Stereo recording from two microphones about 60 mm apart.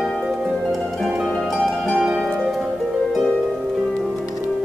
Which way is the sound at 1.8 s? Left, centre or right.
Centre.